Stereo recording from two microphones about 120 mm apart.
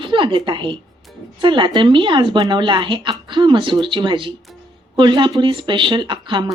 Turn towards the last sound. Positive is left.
turn(degrees=-40)  # may be behind; listen again after turning